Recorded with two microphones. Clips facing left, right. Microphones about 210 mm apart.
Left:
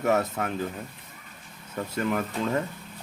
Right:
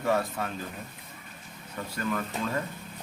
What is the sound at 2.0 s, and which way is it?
Speech, 25° left (ahead or behind).